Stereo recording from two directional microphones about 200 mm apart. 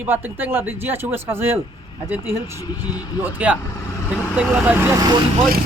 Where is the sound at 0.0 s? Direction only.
10° right (ahead or behind).